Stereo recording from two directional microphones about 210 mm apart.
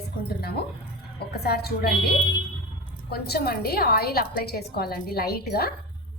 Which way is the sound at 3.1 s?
50° left (ahead or behind).